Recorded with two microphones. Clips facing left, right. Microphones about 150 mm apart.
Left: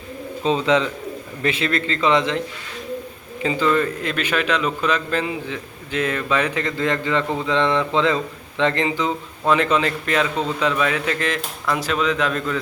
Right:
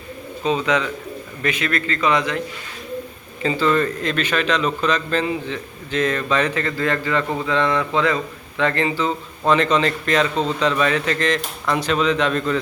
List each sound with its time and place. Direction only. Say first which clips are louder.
0.4 s speech: left 2 dB; 30° left (ahead or behind)
3.4 s a man's voice: right 1 dB; 15° left (ahead or behind)